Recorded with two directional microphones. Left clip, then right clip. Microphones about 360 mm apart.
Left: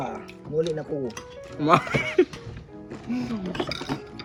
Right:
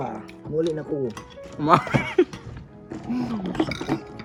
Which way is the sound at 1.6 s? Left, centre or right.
Centre.